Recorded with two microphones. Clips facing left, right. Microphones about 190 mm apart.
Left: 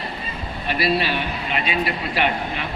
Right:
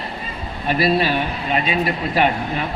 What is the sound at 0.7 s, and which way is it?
Speech, 45° right (ahead or behind).